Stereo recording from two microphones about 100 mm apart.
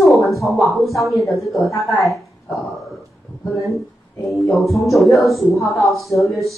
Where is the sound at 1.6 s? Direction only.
30° left (ahead or behind).